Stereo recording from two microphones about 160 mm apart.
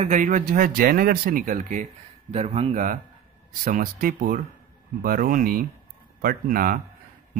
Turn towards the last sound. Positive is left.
turn(degrees=-65)  # may be behind; listen again after turning